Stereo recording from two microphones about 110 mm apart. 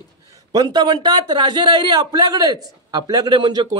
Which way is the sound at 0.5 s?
40° right (ahead or behind).